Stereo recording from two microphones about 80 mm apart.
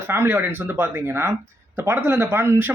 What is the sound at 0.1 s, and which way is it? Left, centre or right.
A man's voice, right.